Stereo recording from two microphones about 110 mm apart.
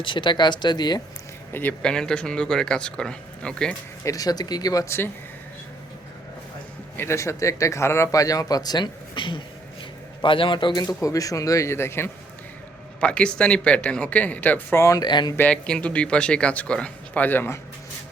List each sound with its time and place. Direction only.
0.0 s speech: 50° left (ahead or behind)
1.5 s speech: 10° left (ahead or behind)
4.0 s speech: 35° left (ahead or behind)
6.9 s a man's voice: 20° left (ahead or behind); by 10.8 s 50° left (ahead or behind)
10.8 s speech: 30° left (ahead or behind)
13.0 s speech: 10° left (ahead or behind)
14.8 s speech: 30° left (ahead or behind)
15.4 s speech: 10° left (ahead or behind)